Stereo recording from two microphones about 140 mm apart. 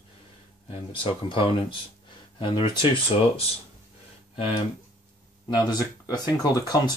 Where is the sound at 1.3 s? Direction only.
40° left (ahead or behind).